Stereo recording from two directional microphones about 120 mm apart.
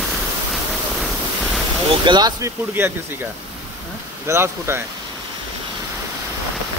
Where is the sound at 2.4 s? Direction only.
20° right (ahead or behind).